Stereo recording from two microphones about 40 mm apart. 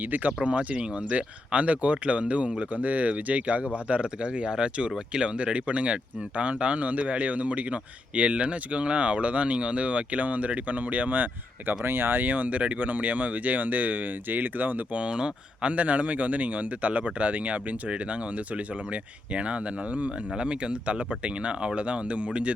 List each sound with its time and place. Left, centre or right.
0.0 s speech: right
0.4 s speech: right
11.9 s speech: right
12.2 s speech: right
14.9 s speech: right
15.7 s speech: right